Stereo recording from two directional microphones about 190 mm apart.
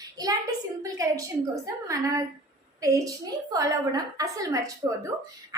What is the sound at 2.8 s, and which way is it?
A woman's voice, 15° right (ahead or behind).